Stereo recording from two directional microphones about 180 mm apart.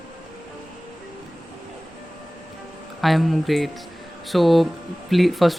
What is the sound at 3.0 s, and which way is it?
Speech, centre (ahead or behind).